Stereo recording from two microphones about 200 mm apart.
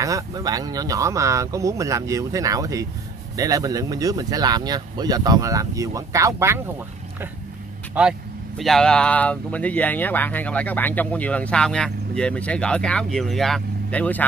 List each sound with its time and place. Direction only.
0.0 s speech: 15° right (ahead or behind)
7.9 s speech: 5° right (ahead or behind)